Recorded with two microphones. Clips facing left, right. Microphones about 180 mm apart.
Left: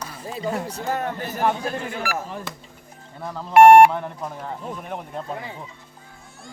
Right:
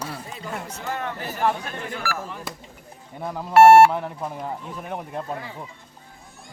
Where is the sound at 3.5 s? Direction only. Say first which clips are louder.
Left 1 dB; 15° left (ahead or behind).